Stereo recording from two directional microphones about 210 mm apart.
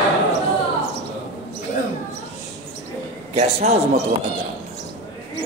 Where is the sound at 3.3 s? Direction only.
30° right (ahead or behind).